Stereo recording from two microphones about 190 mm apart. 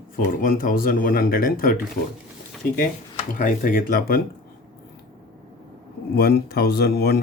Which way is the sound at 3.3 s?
45° left (ahead or behind).